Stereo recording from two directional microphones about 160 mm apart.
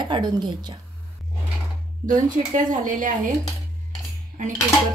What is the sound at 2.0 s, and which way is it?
A woman's voice, 55° right (ahead or behind).